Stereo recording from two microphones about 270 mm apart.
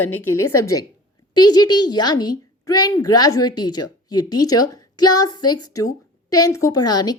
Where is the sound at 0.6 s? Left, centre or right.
Centre.